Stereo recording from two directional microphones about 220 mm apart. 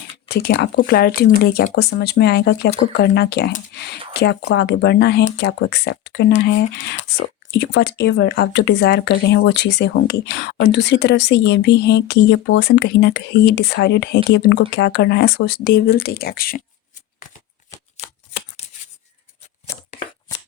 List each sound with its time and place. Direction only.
0.3 s speech: 45° left (ahead or behind)
18.0 s shuffling cards: 30° left (ahead or behind)
19.9 s a sound: 35° left (ahead or behind)